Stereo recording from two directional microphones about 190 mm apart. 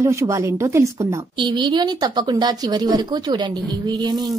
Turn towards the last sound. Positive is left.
turn(degrees=-20)  # may be behind; listen again after turning